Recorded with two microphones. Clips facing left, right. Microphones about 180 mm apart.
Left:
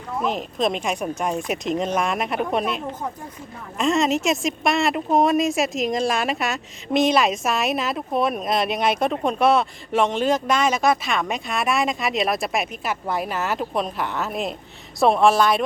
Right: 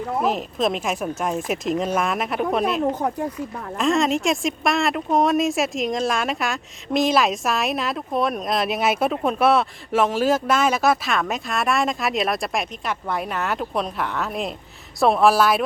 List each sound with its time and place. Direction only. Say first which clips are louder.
0.3 s a woman's voice: left 1 dB; centre (ahead or behind)
2.9 s speech: right 7 dB; 70° right (ahead or behind)
3.8 s a woman's voice: even; centre (ahead or behind)